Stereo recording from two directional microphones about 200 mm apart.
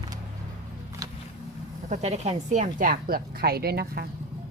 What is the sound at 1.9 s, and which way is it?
A woman's voice, 30° right (ahead or behind).